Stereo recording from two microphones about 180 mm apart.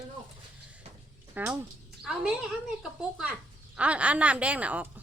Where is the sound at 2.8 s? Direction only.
5° right (ahead or behind).